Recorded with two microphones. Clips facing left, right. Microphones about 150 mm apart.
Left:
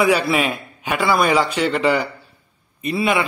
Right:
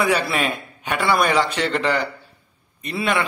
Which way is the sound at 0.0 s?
5° left (ahead or behind).